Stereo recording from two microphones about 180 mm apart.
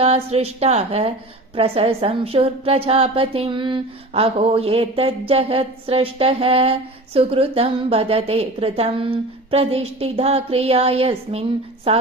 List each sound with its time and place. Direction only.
0.0 s a woman's voice: 35° right (ahead or behind)